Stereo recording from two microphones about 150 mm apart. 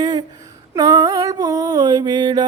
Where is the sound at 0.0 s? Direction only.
30° right (ahead or behind).